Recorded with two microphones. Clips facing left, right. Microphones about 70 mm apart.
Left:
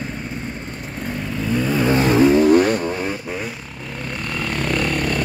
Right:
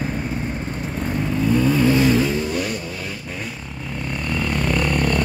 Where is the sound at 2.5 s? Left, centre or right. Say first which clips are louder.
Left 10 dB; left.